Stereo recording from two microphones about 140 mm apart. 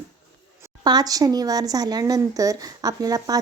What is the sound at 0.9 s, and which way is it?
A woman's voice, 25° right (ahead or behind).